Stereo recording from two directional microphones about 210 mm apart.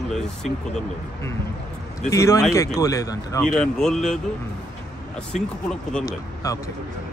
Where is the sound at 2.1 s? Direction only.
15° left (ahead or behind).